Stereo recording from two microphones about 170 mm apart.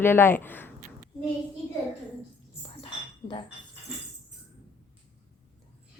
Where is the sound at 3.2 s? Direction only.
30° left (ahead or behind).